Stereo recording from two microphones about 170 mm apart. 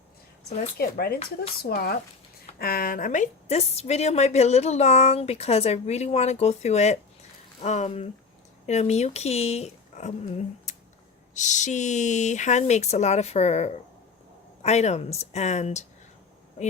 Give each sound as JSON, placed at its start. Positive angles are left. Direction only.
{"t": 0.8, "sound": "a woman's voice", "side_deg": 65}